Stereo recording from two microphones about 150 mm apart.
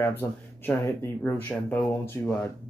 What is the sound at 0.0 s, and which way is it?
Speech, 15° left (ahead or behind).